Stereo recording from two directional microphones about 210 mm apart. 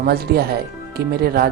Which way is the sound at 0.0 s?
45° right (ahead or behind).